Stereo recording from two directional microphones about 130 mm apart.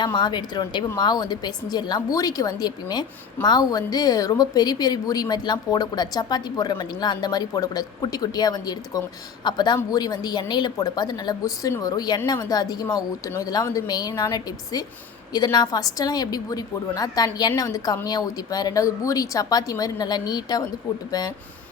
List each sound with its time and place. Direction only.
0.0 s a woman's voice: 35° left (ahead or behind)